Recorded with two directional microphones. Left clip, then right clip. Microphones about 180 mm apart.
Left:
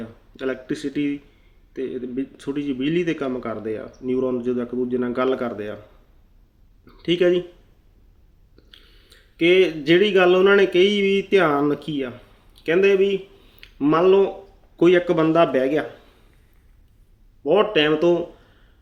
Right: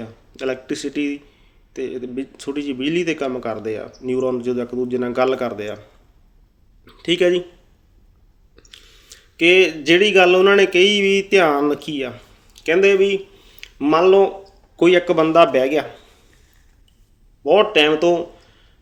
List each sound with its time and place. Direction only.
0.0 s speech: 20° left (ahead or behind)
6.8 s speech: 25° left (ahead or behind)
8.5 s speech: 20° left (ahead or behind)
17.4 s speech: 25° left (ahead or behind)